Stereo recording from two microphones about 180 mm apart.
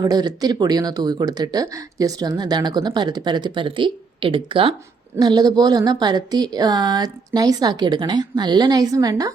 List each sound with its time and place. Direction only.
0.0 s speech: 20° right (ahead or behind)